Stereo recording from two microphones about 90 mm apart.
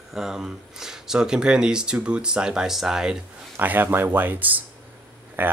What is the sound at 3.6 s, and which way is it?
Speech, 20° right (ahead or behind).